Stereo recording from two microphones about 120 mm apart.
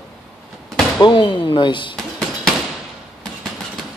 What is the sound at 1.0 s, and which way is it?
Speech, 40° left (ahead or behind).